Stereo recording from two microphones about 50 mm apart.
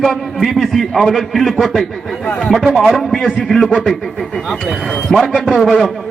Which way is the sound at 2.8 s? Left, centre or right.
Centre.